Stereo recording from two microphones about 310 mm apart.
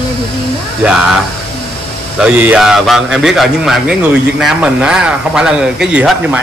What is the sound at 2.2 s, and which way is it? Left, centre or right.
Speech, centre.